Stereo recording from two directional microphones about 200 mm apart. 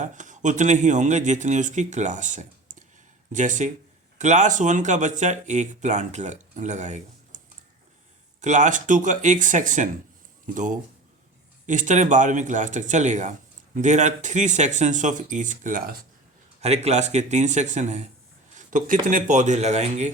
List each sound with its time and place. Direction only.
0.0 s speech: 40° right (ahead or behind)
18.5 s a sound: 40° right (ahead or behind)
19.0 s speech: 40° right (ahead or behind)